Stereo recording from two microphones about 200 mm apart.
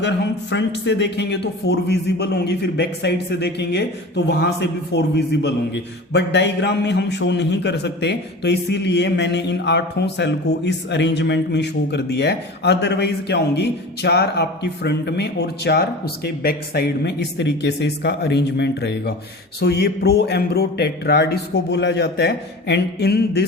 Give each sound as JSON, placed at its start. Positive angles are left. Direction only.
{"t": 0.5, "sound": "a man's voice", "side_deg": 60}